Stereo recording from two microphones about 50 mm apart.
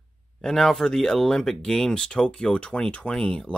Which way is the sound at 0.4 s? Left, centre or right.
Centre.